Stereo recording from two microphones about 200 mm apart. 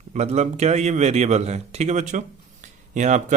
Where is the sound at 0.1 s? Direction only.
35° right (ahead or behind).